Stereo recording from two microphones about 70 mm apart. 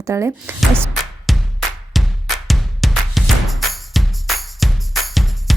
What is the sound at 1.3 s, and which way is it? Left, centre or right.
Music, centre.